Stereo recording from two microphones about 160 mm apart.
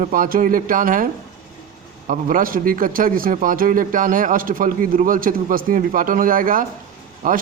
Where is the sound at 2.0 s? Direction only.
60° right (ahead or behind).